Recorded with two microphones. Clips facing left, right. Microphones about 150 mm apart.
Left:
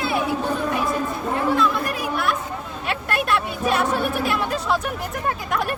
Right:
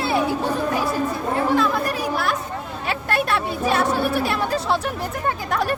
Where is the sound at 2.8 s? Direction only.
35° right (ahead or behind).